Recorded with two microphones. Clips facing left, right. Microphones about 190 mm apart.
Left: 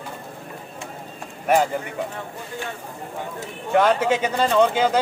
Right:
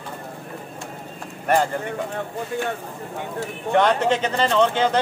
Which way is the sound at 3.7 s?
5° left (ahead or behind).